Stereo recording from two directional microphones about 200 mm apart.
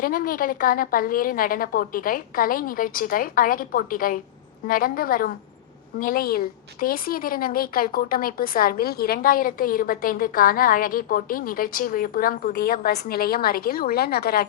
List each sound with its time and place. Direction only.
0.0 s a woman's voice: 45° left (ahead or behind)